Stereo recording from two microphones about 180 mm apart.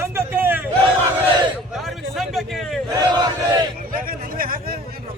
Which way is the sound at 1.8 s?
Centre (ahead or behind).